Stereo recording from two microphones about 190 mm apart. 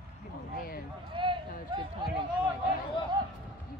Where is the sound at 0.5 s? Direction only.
50° left (ahead or behind).